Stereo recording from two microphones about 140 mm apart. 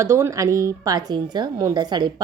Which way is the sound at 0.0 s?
20° right (ahead or behind).